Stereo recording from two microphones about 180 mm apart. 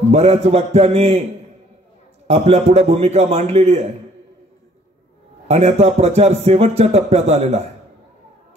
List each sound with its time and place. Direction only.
0.1 s speech: 35° right (ahead or behind)
2.2 s speech: 35° right (ahead or behind)
5.5 s speech: 35° right (ahead or behind)